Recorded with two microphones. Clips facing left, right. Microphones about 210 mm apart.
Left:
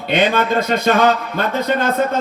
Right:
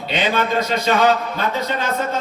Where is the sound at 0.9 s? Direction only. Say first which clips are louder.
Left 4 dB; 55° left (ahead or behind).